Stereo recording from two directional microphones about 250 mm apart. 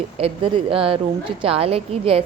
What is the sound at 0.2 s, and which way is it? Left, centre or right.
A woman's voice, right.